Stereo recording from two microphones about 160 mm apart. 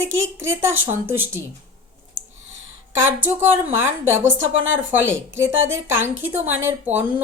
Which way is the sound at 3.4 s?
15° right (ahead or behind).